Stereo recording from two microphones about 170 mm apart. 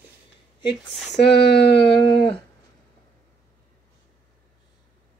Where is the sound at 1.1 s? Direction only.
75° left (ahead or behind).